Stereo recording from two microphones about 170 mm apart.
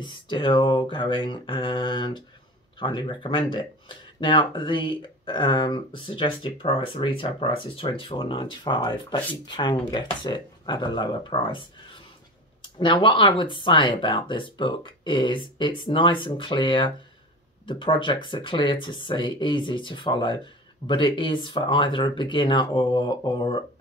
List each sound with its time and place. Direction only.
0.0 s speech: 30° left (ahead or behind)